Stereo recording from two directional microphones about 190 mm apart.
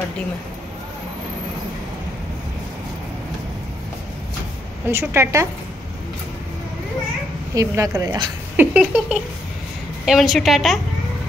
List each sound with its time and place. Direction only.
4.8 s a woman's voice: 10° right (ahead or behind)
7.5 s a woman's voice: 15° right (ahead or behind)
8.7 s a woman's voice: 5° right (ahead or behind)